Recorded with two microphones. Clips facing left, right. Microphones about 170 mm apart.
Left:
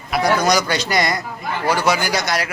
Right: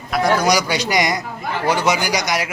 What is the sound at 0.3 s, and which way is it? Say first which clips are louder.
A man's voice: even; 10° right (ahead or behind).